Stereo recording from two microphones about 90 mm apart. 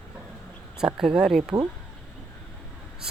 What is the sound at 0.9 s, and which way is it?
Speech, 5° right (ahead or behind).